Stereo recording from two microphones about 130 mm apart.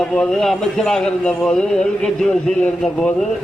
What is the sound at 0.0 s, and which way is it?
Speech, 5° left (ahead or behind).